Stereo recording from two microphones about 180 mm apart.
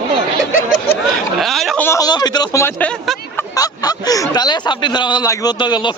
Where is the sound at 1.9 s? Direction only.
20° left (ahead or behind).